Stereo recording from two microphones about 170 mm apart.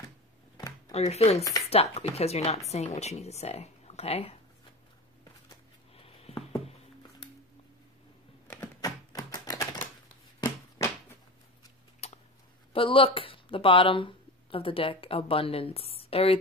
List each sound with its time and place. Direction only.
0.6 s a sound: 20° left (ahead or behind)
0.9 s speech: 40° left (ahead or behind)
6.6 s music: 35° left (ahead or behind)
8.5 s typing: 15° left (ahead or behind)
10.4 s a sound: 15° left (ahead or behind)
12.0 s tick-tock: 40° left (ahead or behind)
12.7 s speech: 30° left (ahead or behind)